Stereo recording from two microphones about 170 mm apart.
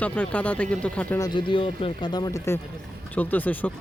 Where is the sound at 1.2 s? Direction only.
30° left (ahead or behind); by 3.7 s 10° left (ahead or behind).